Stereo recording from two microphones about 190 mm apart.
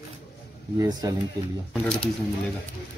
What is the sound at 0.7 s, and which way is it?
Speech, 20° right (ahead or behind).